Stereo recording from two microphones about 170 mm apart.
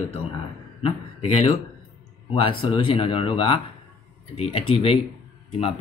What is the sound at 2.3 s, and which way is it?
Speech, 30° left (ahead or behind).